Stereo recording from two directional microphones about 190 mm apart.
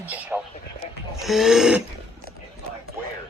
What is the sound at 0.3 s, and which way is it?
Speech, 5° right (ahead or behind).